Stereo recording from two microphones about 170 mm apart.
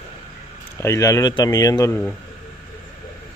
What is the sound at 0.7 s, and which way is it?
Speech, 15° left (ahead or behind).